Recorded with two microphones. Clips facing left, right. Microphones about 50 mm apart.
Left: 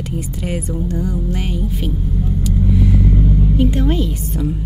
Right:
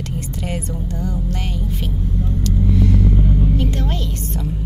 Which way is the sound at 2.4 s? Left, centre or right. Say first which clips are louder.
Left 1 dB; centre.